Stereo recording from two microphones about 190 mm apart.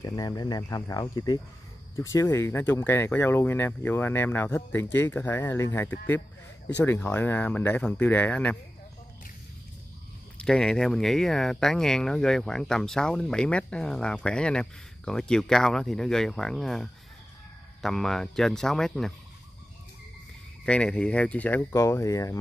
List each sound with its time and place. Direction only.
0.0 s speech: 15° left (ahead or behind)
10.3 s speech: 5° left (ahead or behind)
20.6 s speech: 5° left (ahead or behind)